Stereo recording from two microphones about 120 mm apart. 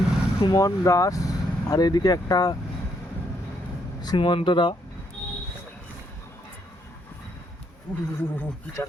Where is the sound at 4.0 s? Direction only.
40° left (ahead or behind).